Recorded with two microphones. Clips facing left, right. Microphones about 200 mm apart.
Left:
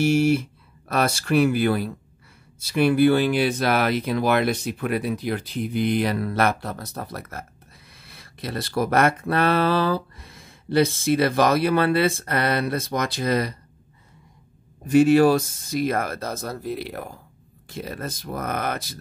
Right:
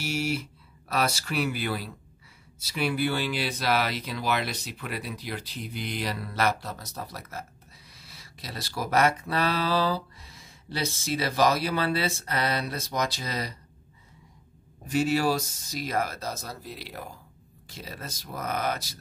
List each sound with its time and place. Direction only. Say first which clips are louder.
0.0 s speech: left 11 dB; 50° left (ahead or behind)
14.9 s speech: left 10 dB; 55° left (ahead or behind)